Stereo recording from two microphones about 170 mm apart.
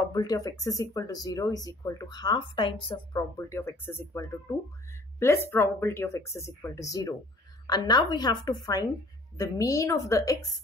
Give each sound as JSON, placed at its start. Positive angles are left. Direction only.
{"t": 0.1, "sound": "speech", "side_deg": 20}